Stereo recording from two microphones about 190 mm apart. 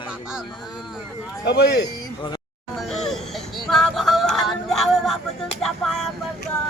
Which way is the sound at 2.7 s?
Centre (ahead or behind).